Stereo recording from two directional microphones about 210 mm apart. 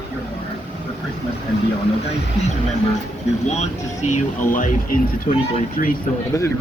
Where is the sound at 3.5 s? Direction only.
35° left (ahead or behind).